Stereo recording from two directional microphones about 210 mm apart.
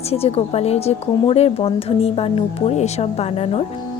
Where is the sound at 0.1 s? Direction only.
30° left (ahead or behind).